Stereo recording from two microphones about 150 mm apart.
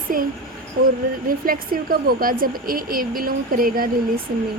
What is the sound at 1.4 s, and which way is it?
Speech, 70° right (ahead or behind).